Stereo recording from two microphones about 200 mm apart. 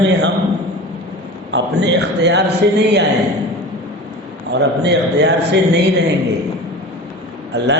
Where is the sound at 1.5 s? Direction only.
60° right (ahead or behind).